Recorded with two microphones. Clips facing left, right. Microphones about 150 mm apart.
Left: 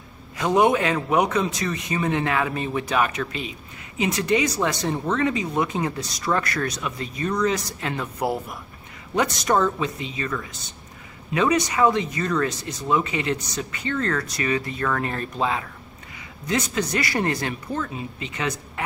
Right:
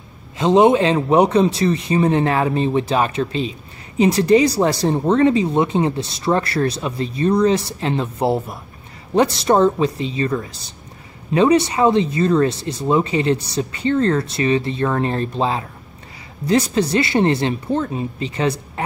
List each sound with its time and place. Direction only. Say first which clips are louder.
0.4 s speech: right 6 dB; 25° right (ahead or behind)